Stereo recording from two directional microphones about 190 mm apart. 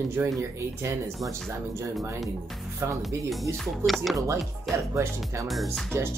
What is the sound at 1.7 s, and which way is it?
Speech, 15° right (ahead or behind).